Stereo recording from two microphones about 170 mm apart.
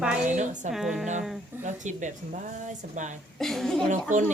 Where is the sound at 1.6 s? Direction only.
45° right (ahead or behind).